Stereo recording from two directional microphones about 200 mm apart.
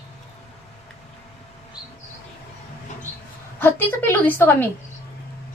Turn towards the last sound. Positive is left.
turn(degrees=10)  # may be behind; listen again after turning